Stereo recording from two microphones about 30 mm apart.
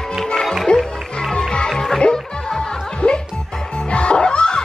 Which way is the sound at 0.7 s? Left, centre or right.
Left.